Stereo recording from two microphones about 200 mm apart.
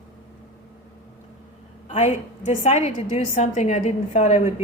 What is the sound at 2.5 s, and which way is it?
A woman's voice, 35° left (ahead or behind).